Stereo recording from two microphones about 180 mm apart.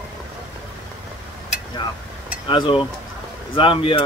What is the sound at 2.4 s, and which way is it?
Speech, 30° left (ahead or behind).